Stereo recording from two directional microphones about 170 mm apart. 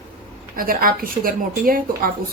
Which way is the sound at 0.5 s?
55° right (ahead or behind).